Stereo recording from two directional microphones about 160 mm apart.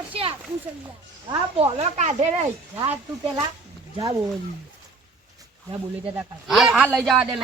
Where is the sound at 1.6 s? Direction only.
40° right (ahead or behind).